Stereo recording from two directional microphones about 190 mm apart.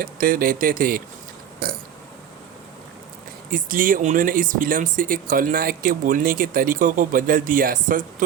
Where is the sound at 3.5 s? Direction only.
45° right (ahead or behind).